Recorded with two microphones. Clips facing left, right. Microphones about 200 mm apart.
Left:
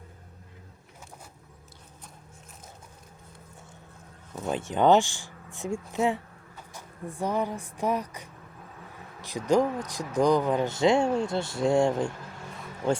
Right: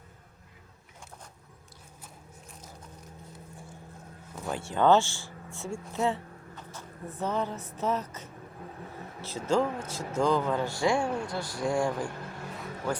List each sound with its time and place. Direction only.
4.4 s speech: 20° left (ahead or behind)